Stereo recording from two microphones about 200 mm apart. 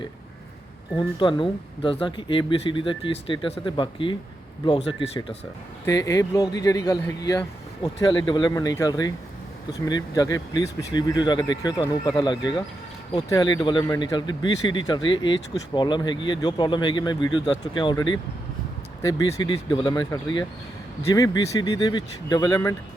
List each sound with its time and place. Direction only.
0.9 s speech: 25° left (ahead or behind)
5.8 s speech: 15° left (ahead or behind)